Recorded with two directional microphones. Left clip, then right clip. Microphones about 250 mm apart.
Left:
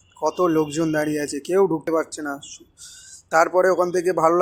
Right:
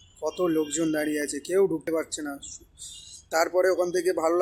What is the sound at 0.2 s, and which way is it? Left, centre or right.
Speech, centre.